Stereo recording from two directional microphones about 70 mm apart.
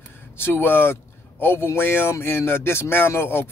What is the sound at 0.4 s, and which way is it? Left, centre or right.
Speech, left.